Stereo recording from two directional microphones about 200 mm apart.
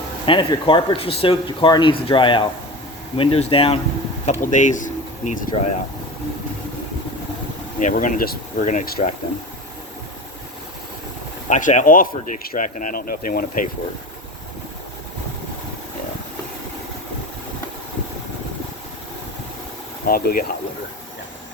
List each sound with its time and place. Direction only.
0.3 s speech: 25° left (ahead or behind)
7.8 s speech: 40° left (ahead or behind)
11.4 s speech: 35° left (ahead or behind)
20.1 s speech: 45° left (ahead or behind)